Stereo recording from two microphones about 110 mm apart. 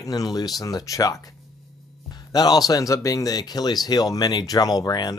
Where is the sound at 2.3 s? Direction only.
40° left (ahead or behind).